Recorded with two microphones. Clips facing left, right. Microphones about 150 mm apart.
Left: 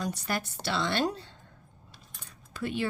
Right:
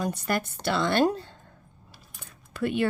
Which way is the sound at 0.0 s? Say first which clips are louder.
Right 4 dB; 50° right (ahead or behind).